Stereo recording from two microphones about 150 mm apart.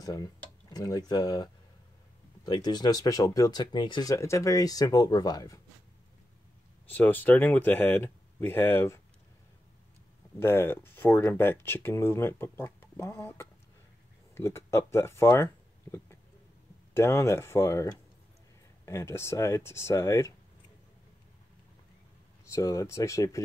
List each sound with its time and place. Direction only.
0.0 s speech: 25° left (ahead or behind)
6.9 s speech: 10° left (ahead or behind)
10.4 s speech: 15° left (ahead or behind)
22.4 s speech: 20° left (ahead or behind)